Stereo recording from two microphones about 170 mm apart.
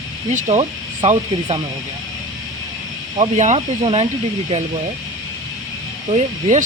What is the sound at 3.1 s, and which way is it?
Speech, 40° right (ahead or behind).